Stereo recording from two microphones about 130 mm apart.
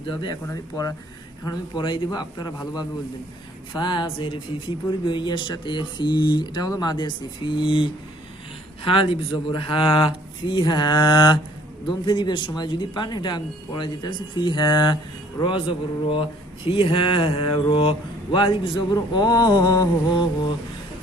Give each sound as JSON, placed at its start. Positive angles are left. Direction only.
{"t": 0.0, "sound": "speech", "side_deg": 40}
{"t": 1.5, "sound": "speech", "side_deg": 35}
{"t": 16.6, "sound": "a sound", "side_deg": 45}
{"t": 18.9, "sound": "speech", "side_deg": 30}